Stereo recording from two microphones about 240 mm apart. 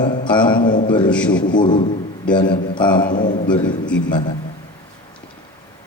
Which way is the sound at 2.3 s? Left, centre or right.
Centre.